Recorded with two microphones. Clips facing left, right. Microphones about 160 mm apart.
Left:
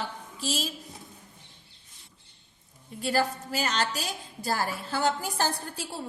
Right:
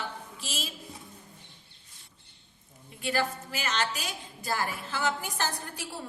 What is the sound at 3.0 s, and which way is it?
A woman's voice, 35° left (ahead or behind).